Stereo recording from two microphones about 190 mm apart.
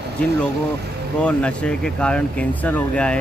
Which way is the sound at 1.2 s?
5° left (ahead or behind).